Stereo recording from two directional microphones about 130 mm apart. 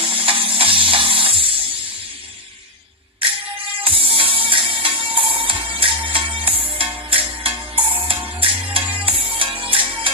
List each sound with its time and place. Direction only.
0.0 s music: 40° right (ahead or behind)
3.8 s music: 45° right (ahead or behind)
8.8 s music: 10° right (ahead or behind)
9.0 s music: 45° right (ahead or behind)